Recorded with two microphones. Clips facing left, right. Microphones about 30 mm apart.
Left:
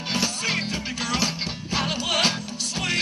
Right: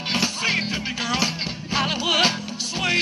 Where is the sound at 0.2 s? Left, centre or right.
Centre.